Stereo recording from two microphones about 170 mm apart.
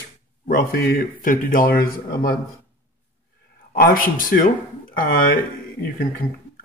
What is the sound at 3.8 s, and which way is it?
Speech, 55° left (ahead or behind).